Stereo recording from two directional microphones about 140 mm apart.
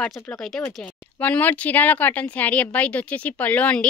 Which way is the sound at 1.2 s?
10° left (ahead or behind).